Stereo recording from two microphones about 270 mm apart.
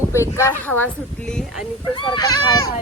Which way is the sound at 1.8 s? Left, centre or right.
Centre.